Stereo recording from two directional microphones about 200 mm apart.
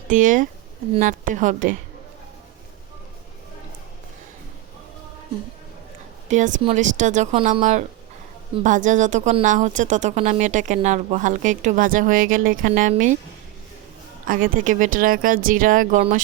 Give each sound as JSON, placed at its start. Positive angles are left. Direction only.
{"t": 0.1, "sound": "speech", "side_deg": -40}
{"t": 6.2, "sound": "speech", "side_deg": -40}
{"t": 14.3, "sound": "speech", "side_deg": -45}